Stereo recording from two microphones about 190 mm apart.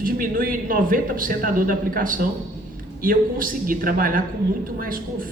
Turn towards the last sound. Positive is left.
turn(degrees=-50)  # may be behind; listen again after turning